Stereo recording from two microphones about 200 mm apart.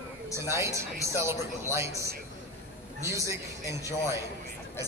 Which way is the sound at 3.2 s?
15° right (ahead or behind).